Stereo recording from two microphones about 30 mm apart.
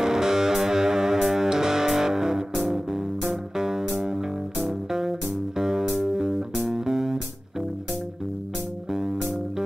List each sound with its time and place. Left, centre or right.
0.0 s music: centre
5.6 s music: centre